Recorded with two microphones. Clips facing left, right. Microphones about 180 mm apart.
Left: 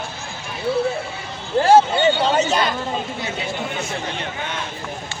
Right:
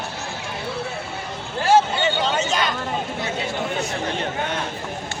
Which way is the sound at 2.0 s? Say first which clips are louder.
Left 5 dB; 35° left (ahead or behind).